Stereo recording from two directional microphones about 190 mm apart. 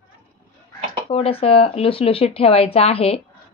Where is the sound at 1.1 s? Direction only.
30° left (ahead or behind).